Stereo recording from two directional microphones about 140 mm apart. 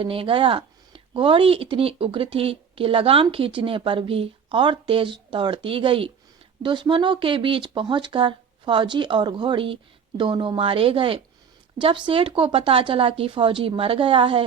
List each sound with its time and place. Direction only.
0.0 s speech: 40° right (ahead or behind)